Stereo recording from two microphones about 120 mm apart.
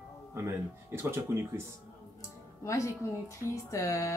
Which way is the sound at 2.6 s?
25° left (ahead or behind).